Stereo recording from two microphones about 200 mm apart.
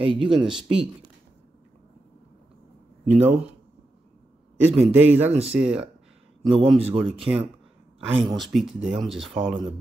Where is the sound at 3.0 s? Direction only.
10° right (ahead or behind).